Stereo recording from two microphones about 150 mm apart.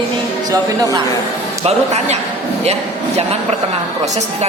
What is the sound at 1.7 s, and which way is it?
A woman's voice, 50° right (ahead or behind).